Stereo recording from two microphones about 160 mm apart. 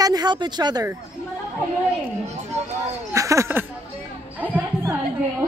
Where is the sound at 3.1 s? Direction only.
20° right (ahead or behind).